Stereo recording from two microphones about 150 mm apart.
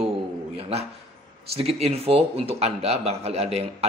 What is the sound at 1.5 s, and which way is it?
Speech, 40° right (ahead or behind).